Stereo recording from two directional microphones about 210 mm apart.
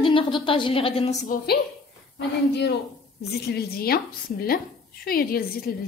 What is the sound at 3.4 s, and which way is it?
Speech, 50° left (ahead or behind).